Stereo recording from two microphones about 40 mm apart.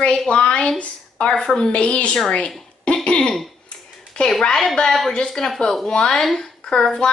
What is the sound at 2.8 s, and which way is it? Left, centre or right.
Cough, left.